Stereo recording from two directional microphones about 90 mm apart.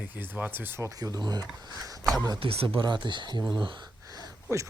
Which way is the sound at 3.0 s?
55° right (ahead or behind).